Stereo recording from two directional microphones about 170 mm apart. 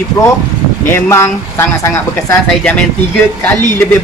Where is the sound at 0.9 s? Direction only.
15° left (ahead or behind).